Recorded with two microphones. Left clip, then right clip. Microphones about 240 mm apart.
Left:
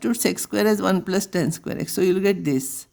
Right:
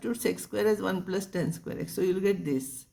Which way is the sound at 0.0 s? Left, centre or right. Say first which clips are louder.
Left 7 dB; left.